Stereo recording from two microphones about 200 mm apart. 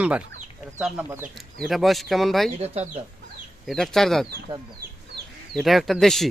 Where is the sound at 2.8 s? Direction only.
30° right (ahead or behind).